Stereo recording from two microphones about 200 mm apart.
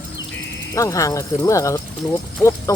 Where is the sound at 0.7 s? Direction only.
15° left (ahead or behind).